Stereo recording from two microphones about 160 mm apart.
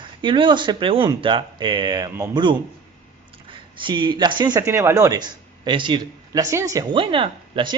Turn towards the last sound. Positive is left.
turn(degrees=-30)  # may be behind; listen again after turning